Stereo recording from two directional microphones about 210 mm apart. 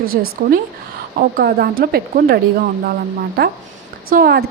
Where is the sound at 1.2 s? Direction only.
45° right (ahead or behind).